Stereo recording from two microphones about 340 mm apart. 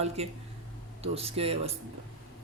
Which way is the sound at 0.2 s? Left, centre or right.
Centre.